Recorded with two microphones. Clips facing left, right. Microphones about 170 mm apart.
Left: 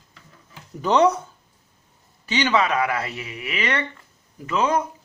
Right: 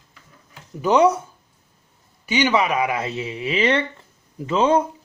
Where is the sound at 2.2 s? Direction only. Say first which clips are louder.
Right 2 dB; 10° right (ahead or behind).